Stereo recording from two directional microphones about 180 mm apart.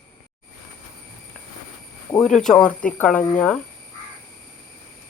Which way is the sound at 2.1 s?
Centre (ahead or behind).